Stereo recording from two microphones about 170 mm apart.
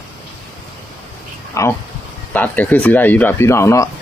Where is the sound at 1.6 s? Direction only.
20° left (ahead or behind).